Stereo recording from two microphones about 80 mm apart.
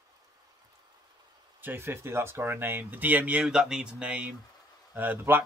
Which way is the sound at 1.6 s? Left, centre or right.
Right.